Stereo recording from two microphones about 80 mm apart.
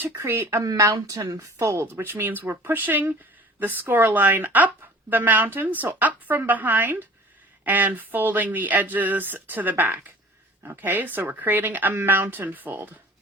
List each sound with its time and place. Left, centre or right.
0.0 s speech: right
1.0 s speech: right